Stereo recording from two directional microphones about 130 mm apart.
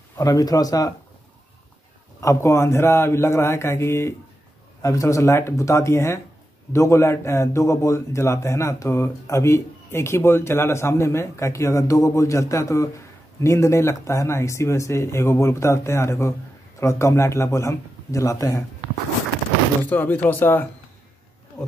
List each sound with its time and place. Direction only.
0.2 s a man's voice: 25° left (ahead or behind)
2.1 s a man's voice: 20° left (ahead or behind)
19.8 s speech: 15° left (ahead or behind)